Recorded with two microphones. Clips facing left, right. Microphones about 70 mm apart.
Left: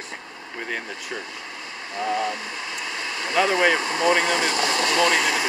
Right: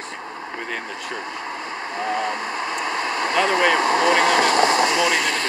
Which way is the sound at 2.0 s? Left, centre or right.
Right.